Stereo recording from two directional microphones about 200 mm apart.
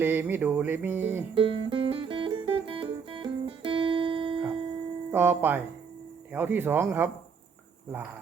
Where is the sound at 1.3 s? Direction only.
25° right (ahead or behind).